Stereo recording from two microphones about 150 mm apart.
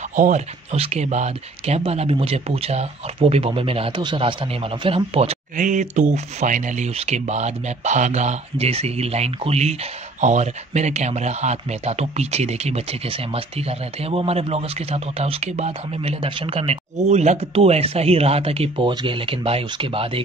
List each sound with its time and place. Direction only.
0.1 s speech: 60° right (ahead or behind)
0.7 s speech: 45° right (ahead or behind)
5.6 s speech: 55° right (ahead or behind); by 20.1 s 35° right (ahead or behind)